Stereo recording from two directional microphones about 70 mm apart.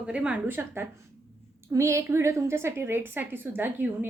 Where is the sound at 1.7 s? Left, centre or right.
Right.